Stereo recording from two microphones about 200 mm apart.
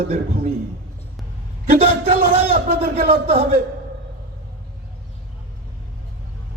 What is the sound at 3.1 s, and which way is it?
Speech, 30° right (ahead or behind).